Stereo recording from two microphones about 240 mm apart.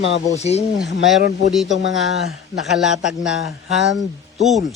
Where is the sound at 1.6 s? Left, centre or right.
Left.